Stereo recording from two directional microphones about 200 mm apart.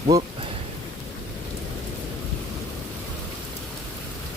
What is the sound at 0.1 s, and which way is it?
Speech, 15° right (ahead or behind).